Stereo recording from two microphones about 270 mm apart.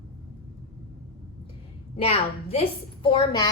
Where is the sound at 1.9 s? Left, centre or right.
Left.